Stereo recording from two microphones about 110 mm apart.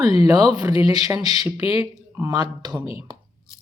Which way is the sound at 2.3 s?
40° right (ahead or behind).